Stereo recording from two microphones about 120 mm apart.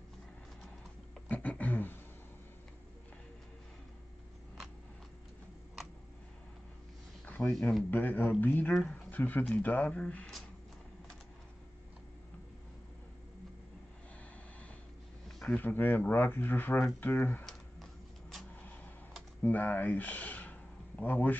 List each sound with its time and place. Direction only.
1.3 s beatboxing: 15° left (ahead or behind)
7.2 s a sound: 15° left (ahead or behind)
7.5 s speech: 5° left (ahead or behind)
7.9 s speech: 15° left (ahead or behind)
15.2 s speech: 5° left (ahead or behind)
19.4 s speech: 15° left (ahead or behind)